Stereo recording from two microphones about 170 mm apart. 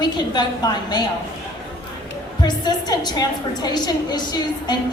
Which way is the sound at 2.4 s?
25° left (ahead or behind).